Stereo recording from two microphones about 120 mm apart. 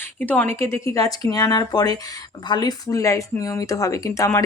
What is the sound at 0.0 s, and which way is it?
Speech, 15° left (ahead or behind).